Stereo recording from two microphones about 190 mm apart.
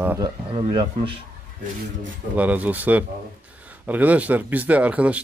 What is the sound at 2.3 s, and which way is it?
Speech, 10° right (ahead or behind).